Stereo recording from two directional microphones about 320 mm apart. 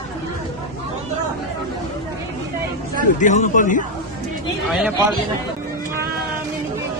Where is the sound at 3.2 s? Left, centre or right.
Left.